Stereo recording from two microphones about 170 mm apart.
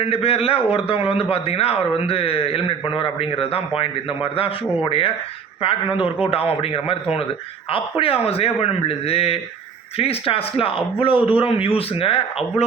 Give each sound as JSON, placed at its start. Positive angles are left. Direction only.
{"t": 0.0, "sound": "speech", "side_deg": 35}
{"t": 6.2, "sound": "speech", "side_deg": 35}